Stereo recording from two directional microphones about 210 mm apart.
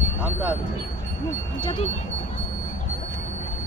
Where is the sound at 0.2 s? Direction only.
5° right (ahead or behind).